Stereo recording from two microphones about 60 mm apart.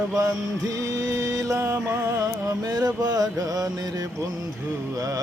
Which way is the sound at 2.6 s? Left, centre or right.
Right.